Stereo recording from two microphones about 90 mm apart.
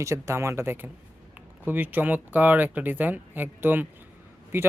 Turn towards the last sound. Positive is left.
turn(degrees=-30)  # may be behind; listen again after turning